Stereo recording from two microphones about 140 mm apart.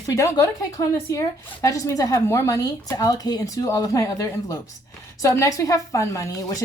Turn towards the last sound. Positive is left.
turn(degrees=25)  # may be behind; listen again after turning